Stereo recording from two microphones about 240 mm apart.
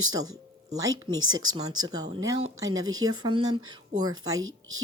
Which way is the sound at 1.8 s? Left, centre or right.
Centre.